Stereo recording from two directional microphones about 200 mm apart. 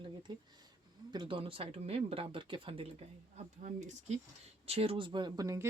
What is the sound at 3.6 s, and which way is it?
Speech, 40° right (ahead or behind).